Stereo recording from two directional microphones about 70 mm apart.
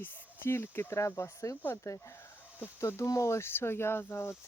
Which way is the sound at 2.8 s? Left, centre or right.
Left.